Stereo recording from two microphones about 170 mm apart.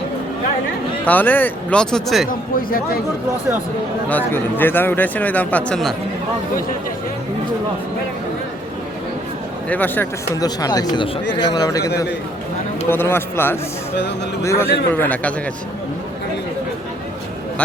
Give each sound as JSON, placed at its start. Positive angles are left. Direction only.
{"t": 1.0, "sound": "speech", "side_deg": 10}
{"t": 2.3, "sound": "speech", "side_deg": 55}
{"t": 4.1, "sound": "speech", "side_deg": 10}
{"t": 9.6, "sound": "speech", "side_deg": 10}
{"t": 10.4, "sound": "speech", "side_deg": 20}
{"t": 12.9, "sound": "speech", "side_deg": 15}